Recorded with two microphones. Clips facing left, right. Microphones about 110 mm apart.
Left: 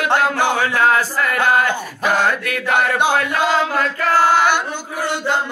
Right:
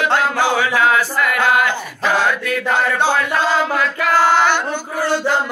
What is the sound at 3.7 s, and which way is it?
Chant, 40° left (ahead or behind).